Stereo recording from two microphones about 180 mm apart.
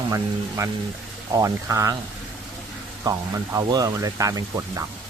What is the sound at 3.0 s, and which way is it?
Speech, 20° right (ahead or behind).